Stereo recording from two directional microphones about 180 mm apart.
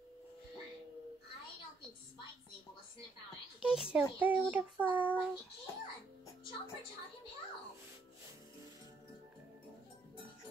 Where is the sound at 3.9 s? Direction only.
10° right (ahead or behind).